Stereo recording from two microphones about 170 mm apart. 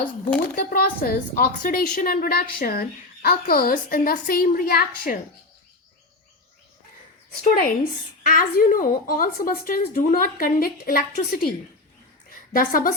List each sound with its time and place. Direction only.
0.5 s a woman's voice: 60° left (ahead or behind)
7.4 s a woman's voice: 55° left (ahead or behind)
12.5 s a woman's voice: 55° left (ahead or behind)